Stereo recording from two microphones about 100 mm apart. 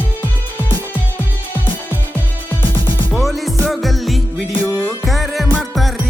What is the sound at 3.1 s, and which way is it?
Music, centre (ahead or behind).